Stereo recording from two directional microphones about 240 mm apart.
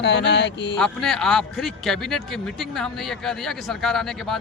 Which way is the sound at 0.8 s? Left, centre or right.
Centre.